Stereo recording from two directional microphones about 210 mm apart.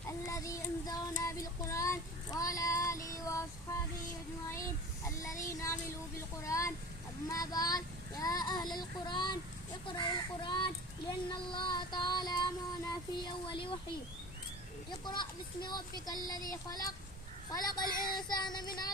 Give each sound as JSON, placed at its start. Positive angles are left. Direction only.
{"t": 0.3, "sound": "child singing", "side_deg": 15}
{"t": 5.0, "sound": "child singing", "side_deg": 15}
{"t": 8.2, "sound": "speech", "side_deg": 20}
{"t": 14.8, "sound": "speech", "side_deg": 20}